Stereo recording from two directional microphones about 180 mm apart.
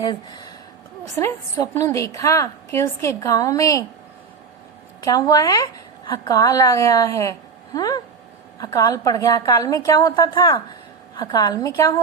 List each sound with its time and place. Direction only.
0.0 s a woman's voice: 20° left (ahead or behind)
4.9 s a woman's voice: 20° left (ahead or behind)